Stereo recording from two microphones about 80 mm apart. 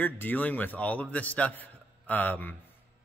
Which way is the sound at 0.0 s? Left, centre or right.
Left.